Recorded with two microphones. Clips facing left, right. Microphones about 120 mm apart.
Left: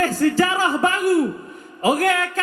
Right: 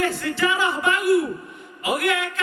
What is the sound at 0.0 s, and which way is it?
Speech, 40° left (ahead or behind).